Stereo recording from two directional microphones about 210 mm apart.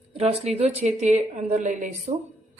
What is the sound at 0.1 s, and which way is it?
A woman's voice, 30° right (ahead or behind).